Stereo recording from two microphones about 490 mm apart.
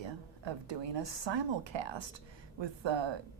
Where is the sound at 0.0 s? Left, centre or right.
Right.